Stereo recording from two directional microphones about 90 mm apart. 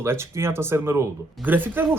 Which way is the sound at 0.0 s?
30° right (ahead or behind).